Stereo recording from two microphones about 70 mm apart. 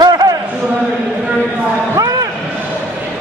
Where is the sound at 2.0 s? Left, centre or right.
Right.